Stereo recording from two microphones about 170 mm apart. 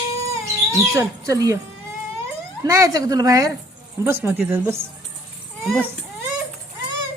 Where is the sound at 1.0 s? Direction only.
20° right (ahead or behind).